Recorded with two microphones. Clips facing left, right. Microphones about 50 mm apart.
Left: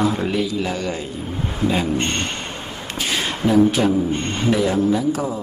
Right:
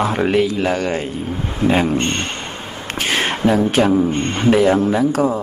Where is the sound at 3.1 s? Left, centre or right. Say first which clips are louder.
Right 4 dB; right.